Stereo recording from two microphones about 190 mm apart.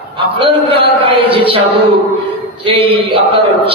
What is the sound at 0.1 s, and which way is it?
A man's voice, 25° right (ahead or behind).